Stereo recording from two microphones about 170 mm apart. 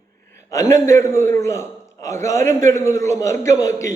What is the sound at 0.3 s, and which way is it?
A man's voice, 20° left (ahead or behind).